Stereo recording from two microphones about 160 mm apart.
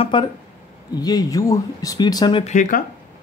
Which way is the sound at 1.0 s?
25° left (ahead or behind).